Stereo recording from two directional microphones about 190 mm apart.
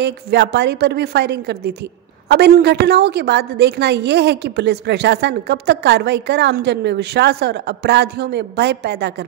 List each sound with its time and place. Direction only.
0.0 s a woman's voice: 60° right (ahead or behind)